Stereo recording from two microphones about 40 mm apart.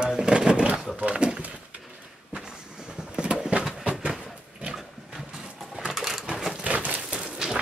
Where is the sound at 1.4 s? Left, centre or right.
Right.